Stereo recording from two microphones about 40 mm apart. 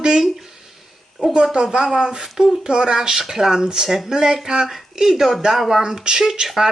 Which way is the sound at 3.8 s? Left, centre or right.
Centre.